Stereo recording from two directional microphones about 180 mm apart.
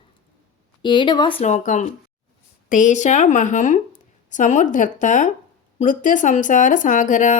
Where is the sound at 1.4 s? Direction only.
40° left (ahead or behind).